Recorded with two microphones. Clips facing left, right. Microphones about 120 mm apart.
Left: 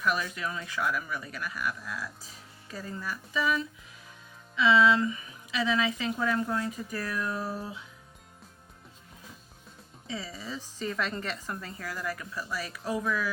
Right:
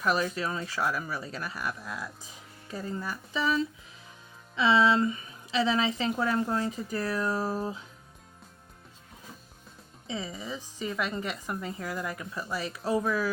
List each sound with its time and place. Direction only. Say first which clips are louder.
0.0 s a woman's voice: right 3 dB; 35° right (ahead or behind)
10.1 s speech: right 2 dB; 20° right (ahead or behind)